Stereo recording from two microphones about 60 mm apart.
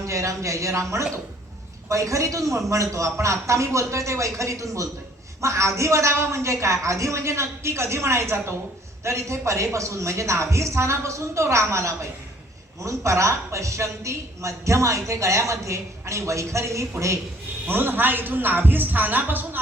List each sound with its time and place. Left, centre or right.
0.0 s a man's voice: right
13.1 s a man's voice: right
17.7 s speech: right